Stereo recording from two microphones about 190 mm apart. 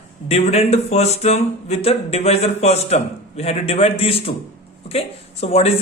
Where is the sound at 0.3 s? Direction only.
35° left (ahead or behind).